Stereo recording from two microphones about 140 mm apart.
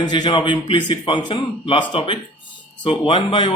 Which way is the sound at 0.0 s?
30° left (ahead or behind).